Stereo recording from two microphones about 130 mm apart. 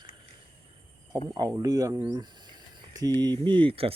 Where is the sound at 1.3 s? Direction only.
30° right (ahead or behind).